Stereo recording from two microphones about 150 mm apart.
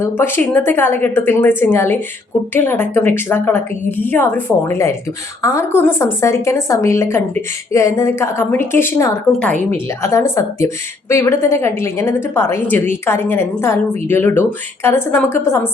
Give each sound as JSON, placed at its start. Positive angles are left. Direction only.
{"t": 0.0, "sound": "a woman's voice", "side_deg": 15}
{"t": 10.0, "sound": "a woman's voice", "side_deg": 20}